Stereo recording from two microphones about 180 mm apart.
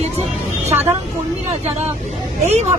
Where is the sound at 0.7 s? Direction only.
15° right (ahead or behind).